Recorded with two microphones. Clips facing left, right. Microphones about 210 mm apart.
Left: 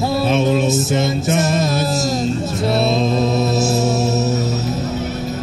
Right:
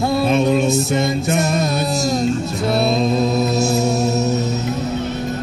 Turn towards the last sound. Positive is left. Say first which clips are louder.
# even
turn(degrees=0)  # may be behind; listen again after turning